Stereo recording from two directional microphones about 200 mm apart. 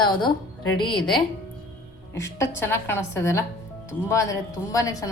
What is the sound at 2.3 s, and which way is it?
A woman's voice, 15° left (ahead or behind).